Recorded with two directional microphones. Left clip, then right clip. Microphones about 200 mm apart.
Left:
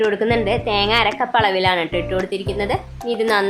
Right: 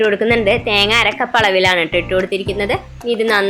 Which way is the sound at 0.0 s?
5° right (ahead or behind).